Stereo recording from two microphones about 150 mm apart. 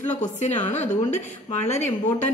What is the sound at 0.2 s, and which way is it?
A woman's voice, 55° left (ahead or behind).